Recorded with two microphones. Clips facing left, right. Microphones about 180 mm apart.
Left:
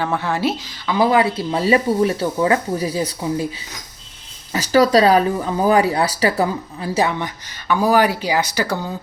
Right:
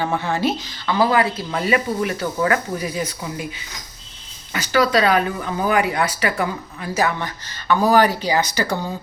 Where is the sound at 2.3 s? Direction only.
20° left (ahead or behind).